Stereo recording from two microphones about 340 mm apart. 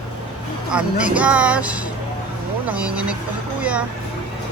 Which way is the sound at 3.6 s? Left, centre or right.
Centre.